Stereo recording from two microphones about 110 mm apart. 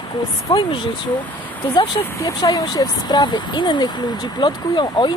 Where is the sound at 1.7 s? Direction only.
45° left (ahead or behind).